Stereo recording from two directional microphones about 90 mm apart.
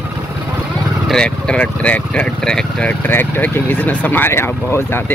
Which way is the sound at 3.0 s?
20° left (ahead or behind).